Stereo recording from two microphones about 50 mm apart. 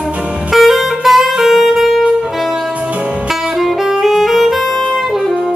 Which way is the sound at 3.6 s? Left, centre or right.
Centre.